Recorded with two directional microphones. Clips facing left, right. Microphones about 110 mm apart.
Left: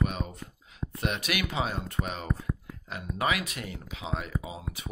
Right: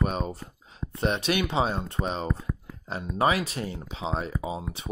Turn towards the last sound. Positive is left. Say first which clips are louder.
# right 4 dB
turn(degrees=-30)  # may be behind; listen again after turning